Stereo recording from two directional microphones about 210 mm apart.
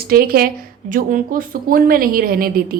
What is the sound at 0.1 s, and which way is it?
A woman's voice, 45° right (ahead or behind).